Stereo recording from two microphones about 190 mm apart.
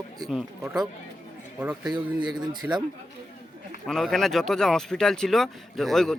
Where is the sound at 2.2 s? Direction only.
25° right (ahead or behind).